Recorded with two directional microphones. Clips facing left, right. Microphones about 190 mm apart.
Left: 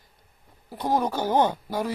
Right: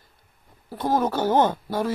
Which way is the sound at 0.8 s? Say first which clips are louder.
Right 2 dB; 15° left (ahead or behind).